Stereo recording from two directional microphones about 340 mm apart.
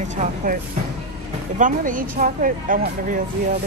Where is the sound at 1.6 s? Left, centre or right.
Right.